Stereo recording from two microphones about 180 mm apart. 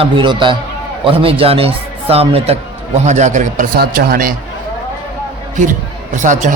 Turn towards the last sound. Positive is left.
turn(degrees=-45)  # may be behind; listen again after turning